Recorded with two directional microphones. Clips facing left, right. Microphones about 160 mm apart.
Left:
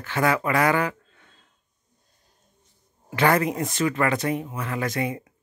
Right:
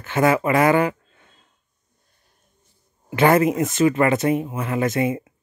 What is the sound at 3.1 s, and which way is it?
Speech, 20° right (ahead or behind).